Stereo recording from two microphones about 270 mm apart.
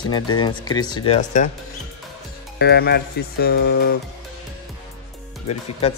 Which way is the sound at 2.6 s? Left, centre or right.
Left.